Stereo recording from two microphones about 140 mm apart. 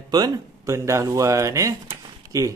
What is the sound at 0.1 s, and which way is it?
A man's voice, 25° right (ahead or behind).